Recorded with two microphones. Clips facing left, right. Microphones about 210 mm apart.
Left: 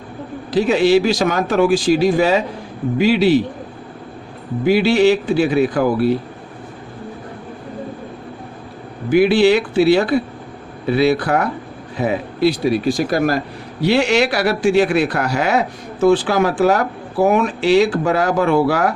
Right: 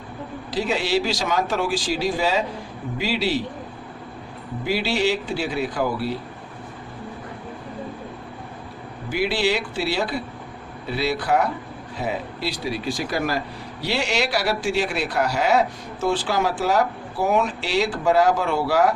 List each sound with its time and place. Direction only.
0.5 s speech: 55° left (ahead or behind)
4.6 s speech: 55° left (ahead or behind)
9.0 s speech: 55° left (ahead or behind)